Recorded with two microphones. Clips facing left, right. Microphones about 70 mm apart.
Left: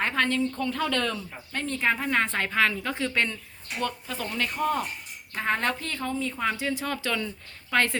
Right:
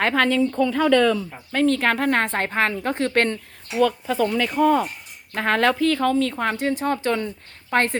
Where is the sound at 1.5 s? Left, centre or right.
Right.